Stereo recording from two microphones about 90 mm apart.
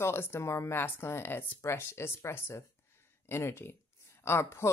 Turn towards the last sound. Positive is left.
turn(degrees=30)  # may be behind; listen again after turning